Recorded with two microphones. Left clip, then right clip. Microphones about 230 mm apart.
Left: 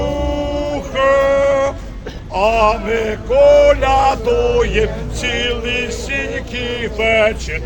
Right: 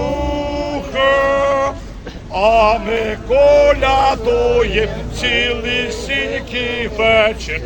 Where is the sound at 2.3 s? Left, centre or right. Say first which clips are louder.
Right 2 dB; centre.